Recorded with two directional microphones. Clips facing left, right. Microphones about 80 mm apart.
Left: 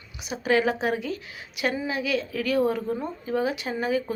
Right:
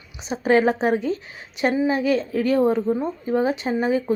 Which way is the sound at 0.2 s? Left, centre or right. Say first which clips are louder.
Right 5 dB; right.